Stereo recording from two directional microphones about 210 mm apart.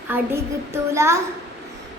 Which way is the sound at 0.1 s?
10° right (ahead or behind).